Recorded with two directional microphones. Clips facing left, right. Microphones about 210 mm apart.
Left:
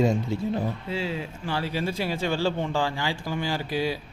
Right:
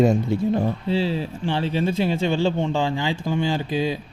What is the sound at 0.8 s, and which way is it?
Speech, 30° right (ahead or behind).